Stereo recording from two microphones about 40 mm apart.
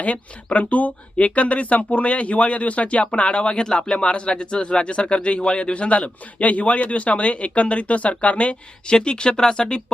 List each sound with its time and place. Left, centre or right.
0.4 s speech: left
9.0 s speech: left